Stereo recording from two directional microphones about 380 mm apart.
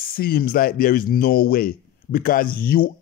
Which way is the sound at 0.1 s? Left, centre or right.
Left.